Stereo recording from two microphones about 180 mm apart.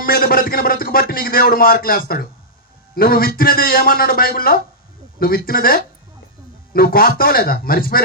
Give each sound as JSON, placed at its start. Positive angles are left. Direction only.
{"t": 0.0, "sound": "a man's voice", "side_deg": 55}